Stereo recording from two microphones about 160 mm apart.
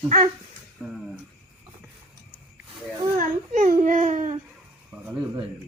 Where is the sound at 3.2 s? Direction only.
50° right (ahead or behind).